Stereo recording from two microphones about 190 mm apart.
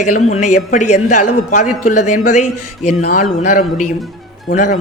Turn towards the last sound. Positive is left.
turn(degrees=40)  # may be behind; listen again after turning